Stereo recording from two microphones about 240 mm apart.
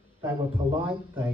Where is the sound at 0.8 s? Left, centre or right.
Centre.